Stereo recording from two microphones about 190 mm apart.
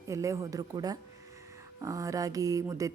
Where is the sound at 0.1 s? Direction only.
15° right (ahead or behind).